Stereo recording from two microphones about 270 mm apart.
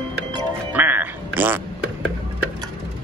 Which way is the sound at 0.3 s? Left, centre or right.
Centre.